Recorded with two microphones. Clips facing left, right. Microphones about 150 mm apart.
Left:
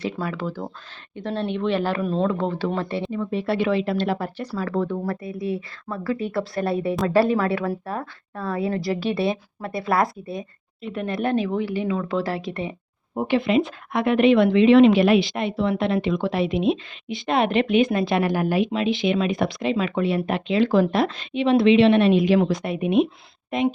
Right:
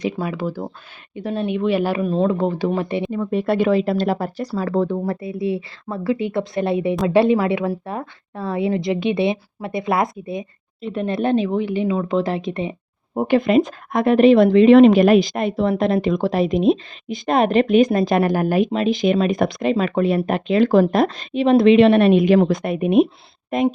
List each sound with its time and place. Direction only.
0.0 s speech: 15° right (ahead or behind)
3.1 s a woman's voice: 50° right (ahead or behind); by 12.7 s 20° right (ahead or behind)
13.1 s a woman's voice: 45° right (ahead or behind)